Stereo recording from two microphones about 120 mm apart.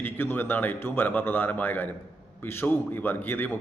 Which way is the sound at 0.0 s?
15° left (ahead or behind).